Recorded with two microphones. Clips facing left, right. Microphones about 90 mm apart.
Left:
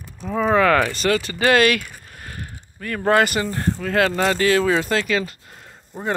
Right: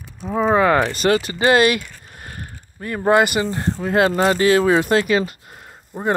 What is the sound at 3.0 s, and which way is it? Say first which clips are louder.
Speech: right 2 dB; 10° right (ahead or behind).